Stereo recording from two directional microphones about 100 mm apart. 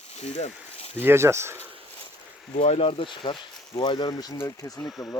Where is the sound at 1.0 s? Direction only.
25° right (ahead or behind).